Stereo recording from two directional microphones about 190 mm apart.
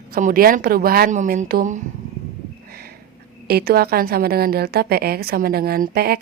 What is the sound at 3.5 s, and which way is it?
A woman's voice, 55° right (ahead or behind).